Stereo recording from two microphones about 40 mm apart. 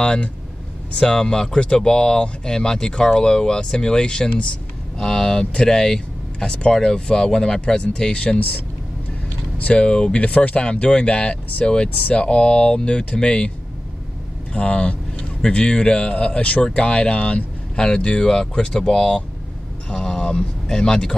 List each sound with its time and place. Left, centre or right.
0.0 s speech: left
9.6 s speech: left
14.5 s speech: left
16.6 s speech: left
18.7 s speech: centre
19.9 s vehicle: left
20.6 s speech: centre